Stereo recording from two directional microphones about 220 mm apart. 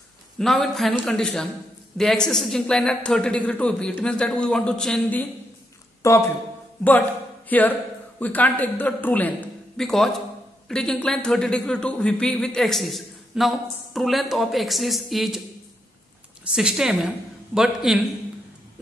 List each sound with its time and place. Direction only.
0.4 s speech: centre (ahead or behind)
7.4 s speech: 5° left (ahead or behind)
16.5 s speech: 5° right (ahead or behind)